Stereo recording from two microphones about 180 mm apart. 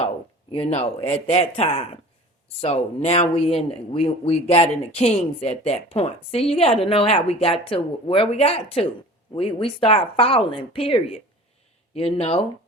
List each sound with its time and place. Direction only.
0.7 s speech: 35° left (ahead or behind)